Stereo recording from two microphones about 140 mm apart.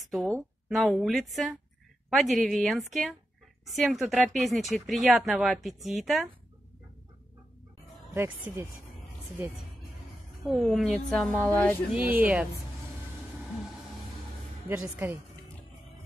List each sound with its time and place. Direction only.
0.1 s speech: centre (ahead or behind)
8.1 s speech: 20° right (ahead or behind)
10.4 s speech: centre (ahead or behind)
11.9 s speech: 10° right (ahead or behind)
14.7 s speech: 15° right (ahead or behind)